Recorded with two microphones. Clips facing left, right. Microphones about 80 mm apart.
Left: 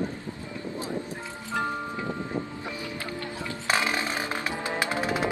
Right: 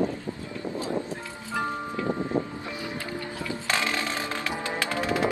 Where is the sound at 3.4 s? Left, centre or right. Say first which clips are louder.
Left 2 dB; left.